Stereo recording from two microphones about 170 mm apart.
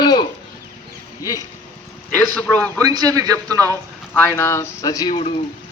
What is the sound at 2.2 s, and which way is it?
Speech, 10° left (ahead or behind).